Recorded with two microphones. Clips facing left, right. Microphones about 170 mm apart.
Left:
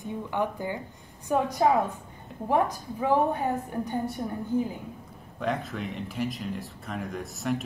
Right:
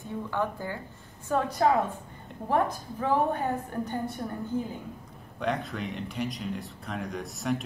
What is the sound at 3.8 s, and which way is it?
Speech, 10° left (ahead or behind).